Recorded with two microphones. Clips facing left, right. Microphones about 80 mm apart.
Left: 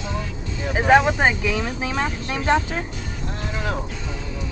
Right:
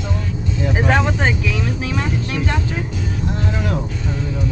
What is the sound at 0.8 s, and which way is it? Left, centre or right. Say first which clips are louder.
Speech: left 4 dB; centre.